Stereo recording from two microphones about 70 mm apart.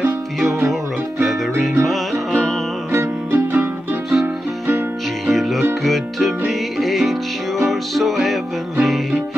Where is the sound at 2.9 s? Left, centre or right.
Right.